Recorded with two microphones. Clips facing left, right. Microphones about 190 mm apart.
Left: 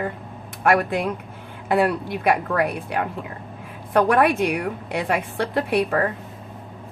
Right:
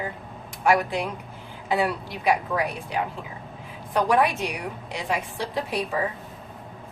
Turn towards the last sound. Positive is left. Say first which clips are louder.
# left 6 dB
turn(degrees=60)  # may be behind; listen again after turning